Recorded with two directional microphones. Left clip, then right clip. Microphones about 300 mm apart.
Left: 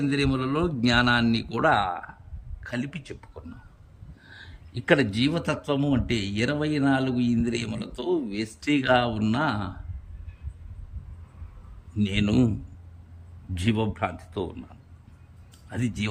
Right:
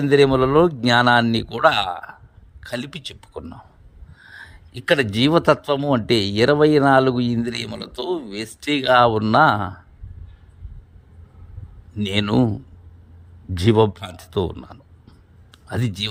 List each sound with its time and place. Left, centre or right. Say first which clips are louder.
0.0 s speech: right 11 dB; centre
4.2 s speech: right 7 dB; centre
11.9 s speech: right 5 dB; centre
13.5 s speech: right 12 dB; centre
15.7 s speech: right 5 dB; centre